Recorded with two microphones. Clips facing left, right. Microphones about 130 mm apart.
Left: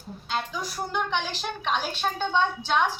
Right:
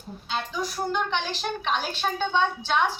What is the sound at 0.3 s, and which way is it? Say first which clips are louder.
A woman's voice: right 1 dB; centre (ahead or behind).